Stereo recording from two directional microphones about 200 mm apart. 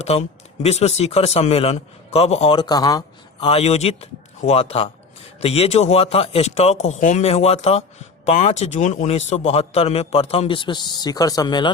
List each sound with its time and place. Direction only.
0.0 s a man's voice: 30° left (ahead or behind)
3.4 s a man's voice: 30° left (ahead or behind)